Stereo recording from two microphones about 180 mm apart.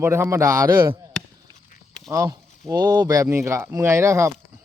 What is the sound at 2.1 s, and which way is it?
Speech, 20° right (ahead or behind).